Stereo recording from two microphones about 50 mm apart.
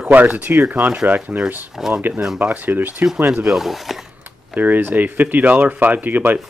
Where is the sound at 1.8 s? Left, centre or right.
Centre.